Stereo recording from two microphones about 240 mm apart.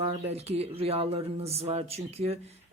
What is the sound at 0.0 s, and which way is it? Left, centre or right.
Speech, right.